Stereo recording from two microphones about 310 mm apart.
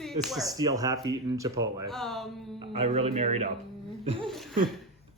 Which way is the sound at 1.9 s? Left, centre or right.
Centre.